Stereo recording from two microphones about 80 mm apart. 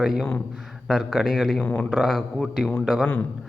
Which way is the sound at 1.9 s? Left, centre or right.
Centre.